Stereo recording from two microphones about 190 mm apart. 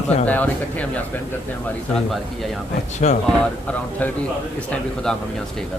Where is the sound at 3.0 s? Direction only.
35° left (ahead or behind).